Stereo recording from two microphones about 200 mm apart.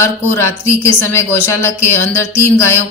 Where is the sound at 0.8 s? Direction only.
10° left (ahead or behind).